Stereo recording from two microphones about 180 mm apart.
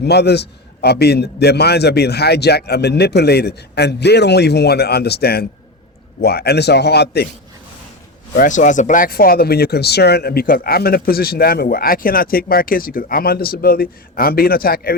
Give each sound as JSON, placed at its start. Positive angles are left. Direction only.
{"t": 0.0, "sound": "speech", "side_deg": 65}
{"t": 8.4, "sound": "speech", "side_deg": 45}